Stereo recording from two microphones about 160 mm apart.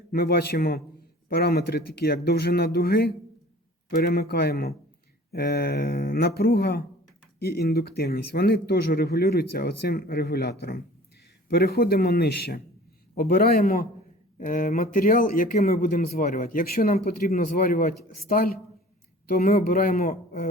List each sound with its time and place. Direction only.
0.1 s speech: 75° left (ahead or behind)